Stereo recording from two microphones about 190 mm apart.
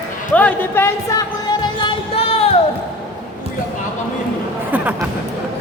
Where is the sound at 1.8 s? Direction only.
30° left (ahead or behind).